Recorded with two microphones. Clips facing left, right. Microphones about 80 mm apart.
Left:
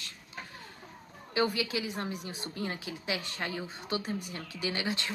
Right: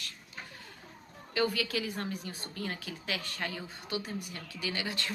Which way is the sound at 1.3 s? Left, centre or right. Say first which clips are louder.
Left 1 dB; left.